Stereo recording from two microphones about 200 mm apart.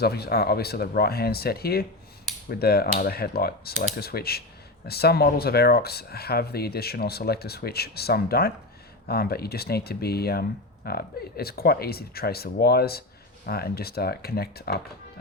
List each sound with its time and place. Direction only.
0.0 s speech: 50° left (ahead or behind)